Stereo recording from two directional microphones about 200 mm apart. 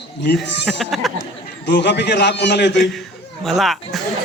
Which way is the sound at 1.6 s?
60° left (ahead or behind).